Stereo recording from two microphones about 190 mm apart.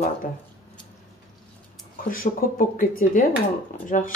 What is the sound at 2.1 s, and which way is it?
Speech, 45° left (ahead or behind).